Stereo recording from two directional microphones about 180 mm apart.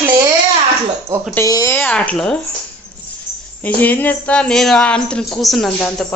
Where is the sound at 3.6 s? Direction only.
10° left (ahead or behind).